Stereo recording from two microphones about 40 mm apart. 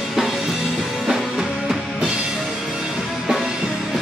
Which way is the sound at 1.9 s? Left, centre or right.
Right.